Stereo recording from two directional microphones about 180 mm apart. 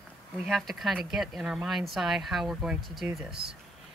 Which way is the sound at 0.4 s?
Centre (ahead or behind).